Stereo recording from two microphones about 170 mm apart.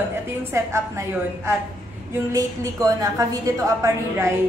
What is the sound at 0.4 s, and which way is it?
A woman's voice, 15° right (ahead or behind).